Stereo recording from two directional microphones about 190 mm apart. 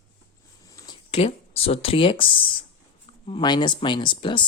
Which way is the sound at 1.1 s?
30° left (ahead or behind).